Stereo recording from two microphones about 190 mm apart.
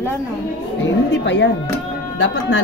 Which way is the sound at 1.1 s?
70° left (ahead or behind).